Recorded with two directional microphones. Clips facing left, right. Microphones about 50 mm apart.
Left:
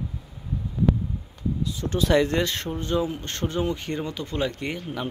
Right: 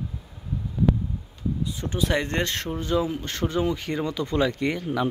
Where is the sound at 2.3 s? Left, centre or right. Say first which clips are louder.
Left 2 dB; right.